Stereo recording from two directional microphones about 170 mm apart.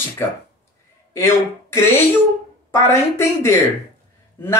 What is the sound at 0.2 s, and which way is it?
Speech, 15° left (ahead or behind).